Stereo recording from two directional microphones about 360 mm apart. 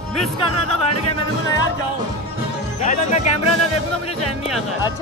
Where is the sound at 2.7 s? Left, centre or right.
Centre.